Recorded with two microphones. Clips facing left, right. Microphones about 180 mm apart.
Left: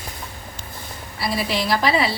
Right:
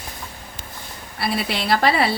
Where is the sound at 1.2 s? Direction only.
60° right (ahead or behind).